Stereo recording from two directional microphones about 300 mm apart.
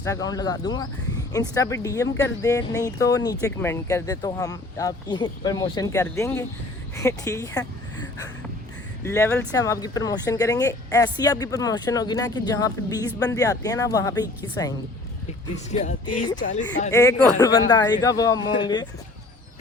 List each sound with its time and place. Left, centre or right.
0.0 s speech: centre
9.0 s speech: centre
15.7 s speech: left
16.9 s speech: centre